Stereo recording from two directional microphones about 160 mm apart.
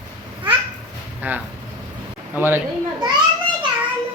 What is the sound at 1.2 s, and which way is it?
A woman's voice, 10° right (ahead or behind).